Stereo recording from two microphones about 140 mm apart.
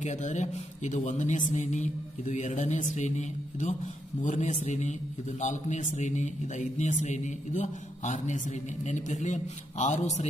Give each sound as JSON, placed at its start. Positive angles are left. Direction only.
{"t": 0.0, "sound": "a man's voice", "side_deg": 60}